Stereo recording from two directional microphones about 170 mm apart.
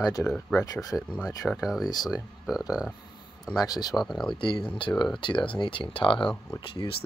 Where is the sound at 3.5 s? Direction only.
20° left (ahead or behind).